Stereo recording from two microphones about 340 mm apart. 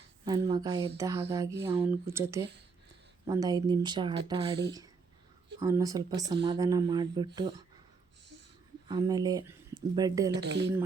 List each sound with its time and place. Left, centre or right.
0.3 s speech: centre
5.5 s speech: centre
8.9 s speech: centre
10.3 s speech: right